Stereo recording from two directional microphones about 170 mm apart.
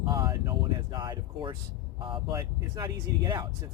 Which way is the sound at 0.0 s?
25° right (ahead or behind).